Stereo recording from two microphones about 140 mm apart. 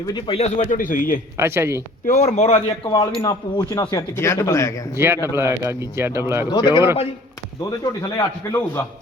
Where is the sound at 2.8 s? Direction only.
30° left (ahead or behind).